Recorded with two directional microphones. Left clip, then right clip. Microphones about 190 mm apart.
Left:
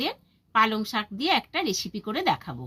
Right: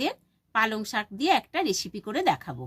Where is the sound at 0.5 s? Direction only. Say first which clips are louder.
Left 3 dB; 30° right (ahead or behind).